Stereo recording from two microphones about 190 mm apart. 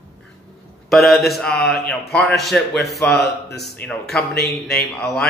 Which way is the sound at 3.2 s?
60° left (ahead or behind).